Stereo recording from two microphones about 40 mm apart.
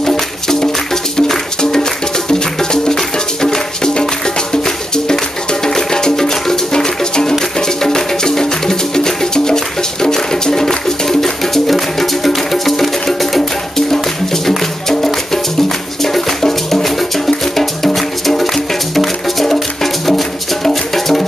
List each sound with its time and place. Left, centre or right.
0.0 s music: centre
16.0 s music: centre